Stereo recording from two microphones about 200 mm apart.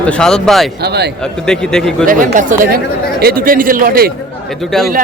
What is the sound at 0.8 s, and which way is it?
Speech, 55° right (ahead or behind).